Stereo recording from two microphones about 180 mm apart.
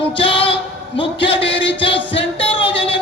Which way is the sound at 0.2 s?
30° left (ahead or behind).